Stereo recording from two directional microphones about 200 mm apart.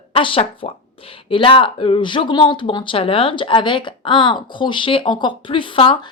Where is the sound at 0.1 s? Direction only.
25° left (ahead or behind).